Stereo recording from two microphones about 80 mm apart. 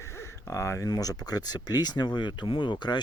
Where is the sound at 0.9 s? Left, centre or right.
Left.